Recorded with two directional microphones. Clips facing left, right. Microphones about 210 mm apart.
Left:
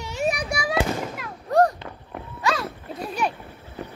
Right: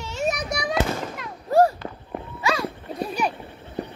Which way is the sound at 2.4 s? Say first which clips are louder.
Even; centre (ahead or behind).